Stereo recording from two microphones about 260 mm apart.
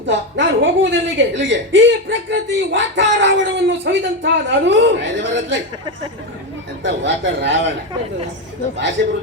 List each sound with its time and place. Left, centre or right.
0.0 s a woman's voice: right
6.8 s a woman's voice: right